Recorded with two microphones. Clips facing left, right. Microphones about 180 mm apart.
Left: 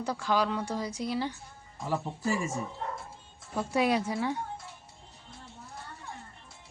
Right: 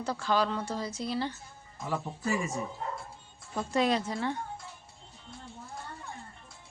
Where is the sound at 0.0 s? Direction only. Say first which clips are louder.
Even; 15° left (ahead or behind).